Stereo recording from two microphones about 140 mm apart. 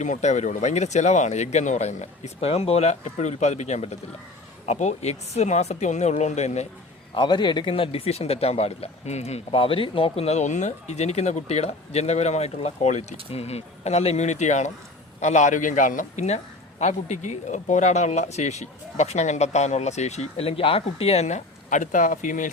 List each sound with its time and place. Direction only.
0.0 s a man's voice: 60° left (ahead or behind)
7.1 s a man's voice: 35° left (ahead or behind); by 22.4 s 65° left (ahead or behind)